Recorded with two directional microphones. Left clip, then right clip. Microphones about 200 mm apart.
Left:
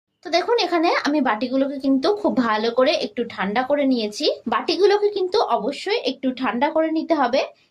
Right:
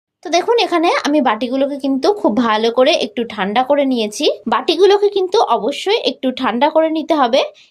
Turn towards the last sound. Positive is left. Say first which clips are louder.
# right 6 dB
turn(degrees=-40)  # may be behind; listen again after turning